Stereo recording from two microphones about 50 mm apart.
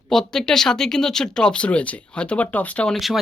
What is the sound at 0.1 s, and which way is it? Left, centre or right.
Speech, centre.